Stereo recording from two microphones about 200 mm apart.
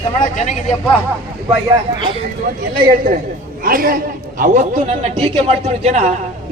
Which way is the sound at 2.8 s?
45° right (ahead or behind).